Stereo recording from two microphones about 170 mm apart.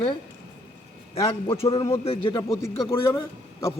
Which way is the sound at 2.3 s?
15° left (ahead or behind).